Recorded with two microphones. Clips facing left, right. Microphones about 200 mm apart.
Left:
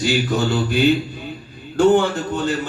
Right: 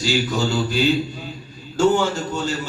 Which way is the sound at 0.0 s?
55° left (ahead or behind).